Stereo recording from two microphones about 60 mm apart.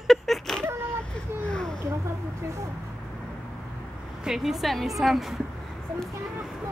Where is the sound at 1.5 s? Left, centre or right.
Centre.